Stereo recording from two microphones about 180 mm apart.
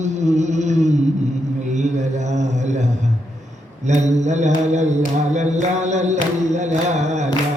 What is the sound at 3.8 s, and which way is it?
Mantra, 40° right (ahead or behind).